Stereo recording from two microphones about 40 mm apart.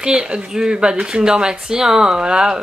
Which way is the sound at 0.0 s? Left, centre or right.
Right.